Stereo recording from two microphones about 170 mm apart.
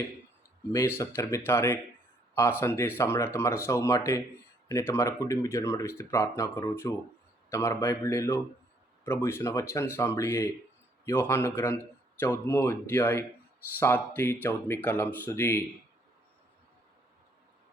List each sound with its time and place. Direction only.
0.7 s speech: 15° left (ahead or behind)